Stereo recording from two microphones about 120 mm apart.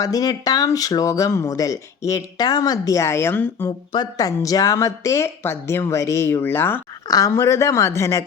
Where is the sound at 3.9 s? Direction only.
35° left (ahead or behind).